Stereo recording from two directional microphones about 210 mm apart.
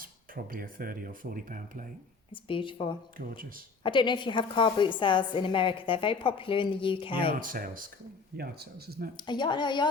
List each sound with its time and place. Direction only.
0.0 s speech: 45° right (ahead or behind)
2.3 s a woman's voice: 25° left (ahead or behind)
3.2 s speech: 40° right (ahead or behind)
3.8 s a woman's voice: 20° left (ahead or behind)
7.3 s speech: 40° right (ahead or behind)
9.1 s a woman's voice: 20° left (ahead or behind)